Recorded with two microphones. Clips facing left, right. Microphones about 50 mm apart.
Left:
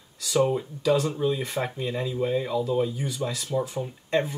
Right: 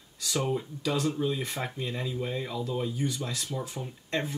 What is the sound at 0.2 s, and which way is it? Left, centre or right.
Speech, centre.